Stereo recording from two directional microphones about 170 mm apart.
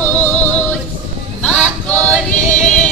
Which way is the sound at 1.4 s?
5° left (ahead or behind).